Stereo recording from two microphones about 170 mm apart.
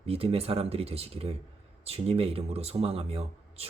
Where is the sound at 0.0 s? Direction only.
35° right (ahead or behind).